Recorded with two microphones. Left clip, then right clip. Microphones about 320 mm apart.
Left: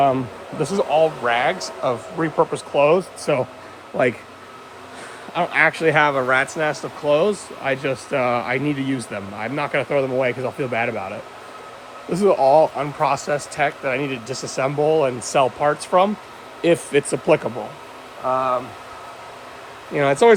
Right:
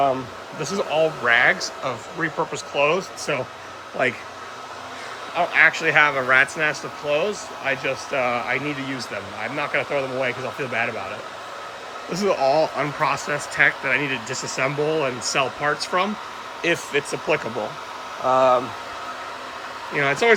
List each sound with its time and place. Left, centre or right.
0.6 s speech: centre
5.3 s speech: left
12.2 s speech: centre
18.3 s speech: centre
19.9 s speech: centre